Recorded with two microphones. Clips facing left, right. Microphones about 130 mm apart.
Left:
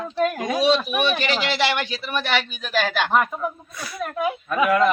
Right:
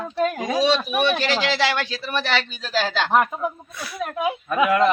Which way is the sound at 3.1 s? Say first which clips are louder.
Right 4 dB; 5° right (ahead or behind).